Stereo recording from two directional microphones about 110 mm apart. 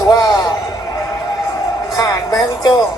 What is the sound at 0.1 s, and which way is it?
Music, 35° left (ahead or behind).